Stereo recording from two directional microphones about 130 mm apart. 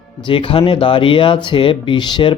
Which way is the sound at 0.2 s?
40° left (ahead or behind).